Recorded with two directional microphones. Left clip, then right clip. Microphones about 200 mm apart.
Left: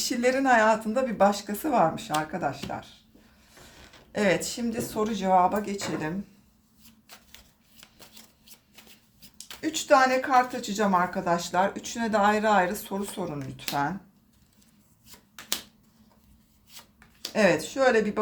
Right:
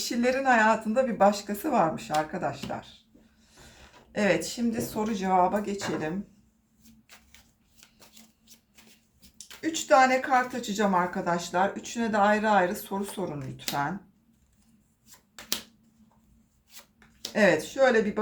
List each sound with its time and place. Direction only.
0.0 s a woman's voice: 25° left (ahead or behind)
4.1 s a woman's voice: 25° left (ahead or behind)
7.8 s shuffling cards: 15° left (ahead or behind)
9.6 s a woman's voice: 20° left (ahead or behind)
17.3 s a woman's voice: 25° left (ahead or behind)